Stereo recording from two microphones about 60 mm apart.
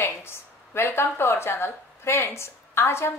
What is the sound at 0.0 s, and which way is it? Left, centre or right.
A woman's voice, left.